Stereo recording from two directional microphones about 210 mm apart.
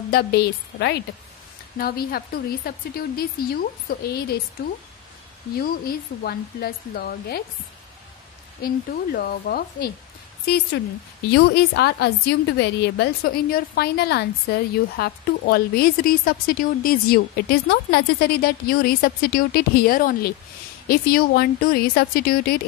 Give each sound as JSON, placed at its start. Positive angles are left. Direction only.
{"t": 0.1, "sound": "a woman's voice", "side_deg": 45}
{"t": 5.6, "sound": "a woman's voice", "side_deg": 45}
{"t": 8.6, "sound": "a woman's voice", "side_deg": 45}